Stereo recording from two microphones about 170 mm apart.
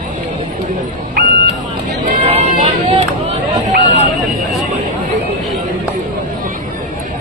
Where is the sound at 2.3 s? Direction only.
40° right (ahead or behind).